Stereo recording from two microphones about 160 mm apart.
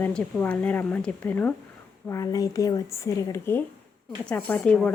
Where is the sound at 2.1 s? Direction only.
20° left (ahead or behind).